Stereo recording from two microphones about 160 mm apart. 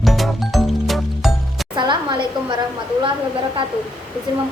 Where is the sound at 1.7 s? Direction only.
30° right (ahead or behind).